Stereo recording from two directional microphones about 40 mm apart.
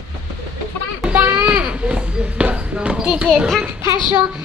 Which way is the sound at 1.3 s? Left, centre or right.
Right.